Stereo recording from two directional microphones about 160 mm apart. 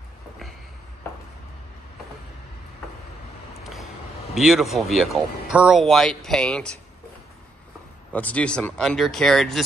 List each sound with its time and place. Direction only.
4.4 s speech: 5° right (ahead or behind)
8.1 s speech: 10° left (ahead or behind)